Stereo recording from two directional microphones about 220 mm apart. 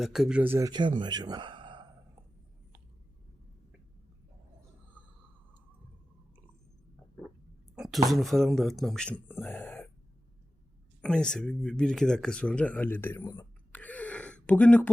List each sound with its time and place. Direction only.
0.0 s speech: centre (ahead or behind); by 1.9 s 20° right (ahead or behind)
7.8 s speech: centre (ahead or behind)
11.0 s speech: 5° left (ahead or behind)